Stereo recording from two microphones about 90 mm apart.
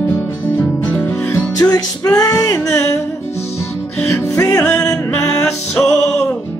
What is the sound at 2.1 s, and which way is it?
Speech, 40° left (ahead or behind).